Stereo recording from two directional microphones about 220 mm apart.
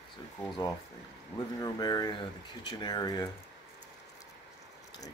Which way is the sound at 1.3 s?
20° left (ahead or behind).